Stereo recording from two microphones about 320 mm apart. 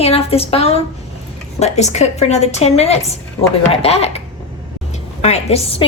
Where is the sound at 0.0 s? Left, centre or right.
Centre.